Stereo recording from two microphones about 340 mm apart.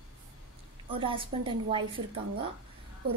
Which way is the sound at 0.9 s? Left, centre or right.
Centre.